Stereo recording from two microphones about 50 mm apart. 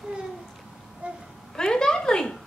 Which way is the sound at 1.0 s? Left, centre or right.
Right.